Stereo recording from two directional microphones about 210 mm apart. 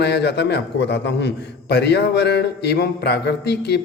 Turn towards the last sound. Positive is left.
turn(degrees=50)  # may be behind; listen again after turning